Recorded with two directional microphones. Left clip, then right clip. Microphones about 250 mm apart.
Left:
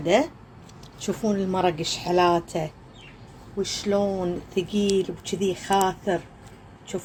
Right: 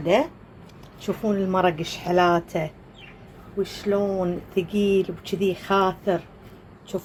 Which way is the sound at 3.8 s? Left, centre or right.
Centre.